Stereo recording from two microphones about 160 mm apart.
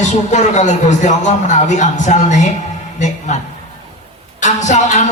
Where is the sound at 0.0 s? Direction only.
45° left (ahead or behind).